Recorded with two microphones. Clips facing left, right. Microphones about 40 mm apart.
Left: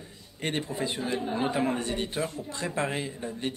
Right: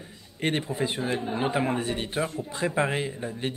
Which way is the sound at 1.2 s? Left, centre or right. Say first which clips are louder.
Left 1 dB; centre.